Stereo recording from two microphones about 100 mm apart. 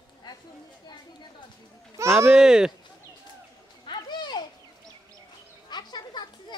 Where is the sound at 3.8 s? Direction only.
50° left (ahead or behind).